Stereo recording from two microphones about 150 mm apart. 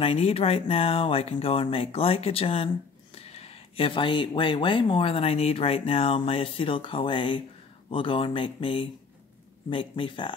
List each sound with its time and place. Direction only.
0.0 s speech: 40° left (ahead or behind)